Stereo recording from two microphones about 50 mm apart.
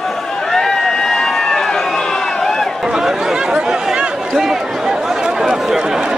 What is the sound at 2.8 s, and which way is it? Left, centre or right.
Chatter, centre.